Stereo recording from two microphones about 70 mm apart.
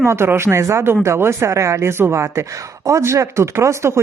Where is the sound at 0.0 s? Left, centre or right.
Right.